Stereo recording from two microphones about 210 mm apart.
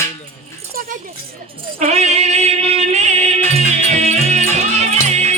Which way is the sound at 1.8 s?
30° right (ahead or behind).